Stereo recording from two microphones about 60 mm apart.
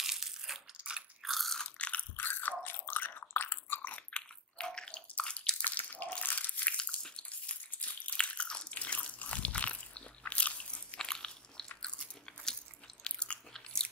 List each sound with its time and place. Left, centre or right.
0.0 s crushing: centre
0.7 s biting: centre
1.2 s crunch: centre
1.6 s ratchet: left
2.0 s chewing: left
4.6 s bathtub: centre
5.7 s a sound: left
6.2 s biting: left
7.0 s bathtub: centre
7.2 s biting: left
11.1 s biting: centre